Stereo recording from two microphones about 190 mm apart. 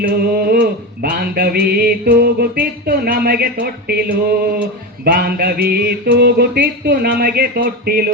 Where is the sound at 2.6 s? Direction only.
50° right (ahead or behind).